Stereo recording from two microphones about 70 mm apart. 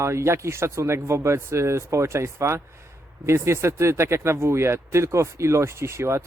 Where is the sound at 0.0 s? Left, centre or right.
Right.